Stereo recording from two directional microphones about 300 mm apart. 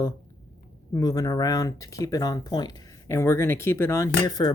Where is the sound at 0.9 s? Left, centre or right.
Centre.